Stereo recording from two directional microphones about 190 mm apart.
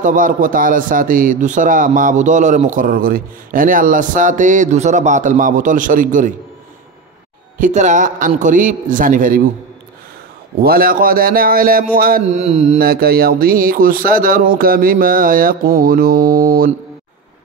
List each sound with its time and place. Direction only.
0.0 s a man's voice: 45° right (ahead or behind)
7.5 s a man's voice: 40° right (ahead or behind)
10.6 s a man's voice: 50° right (ahead or behind)
12.3 s mantra: 35° right (ahead or behind)
12.7 s a man's voice: 50° right (ahead or behind)